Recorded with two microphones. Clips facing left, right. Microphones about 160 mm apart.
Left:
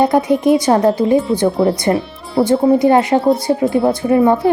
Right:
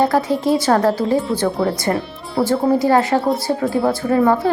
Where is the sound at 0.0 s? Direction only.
20° left (ahead or behind).